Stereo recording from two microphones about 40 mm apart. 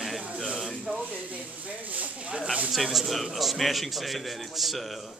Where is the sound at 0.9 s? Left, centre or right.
Right.